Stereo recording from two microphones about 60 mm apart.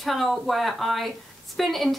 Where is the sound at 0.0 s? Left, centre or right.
Centre.